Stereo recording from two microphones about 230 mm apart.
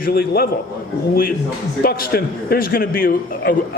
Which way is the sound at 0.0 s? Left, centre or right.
Left.